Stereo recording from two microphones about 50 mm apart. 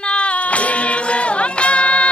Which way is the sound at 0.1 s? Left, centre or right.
Left.